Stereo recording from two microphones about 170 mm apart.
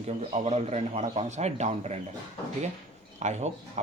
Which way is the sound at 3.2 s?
40° right (ahead or behind).